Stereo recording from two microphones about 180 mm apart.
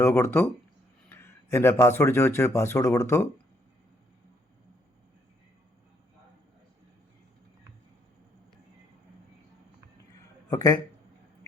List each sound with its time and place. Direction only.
0.0 s speech: 10° left (ahead or behind)
10.5 s speech: 20° left (ahead or behind)